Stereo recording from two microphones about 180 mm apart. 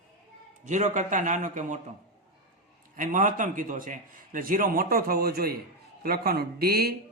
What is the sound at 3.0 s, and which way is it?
A man's voice, 45° right (ahead or behind).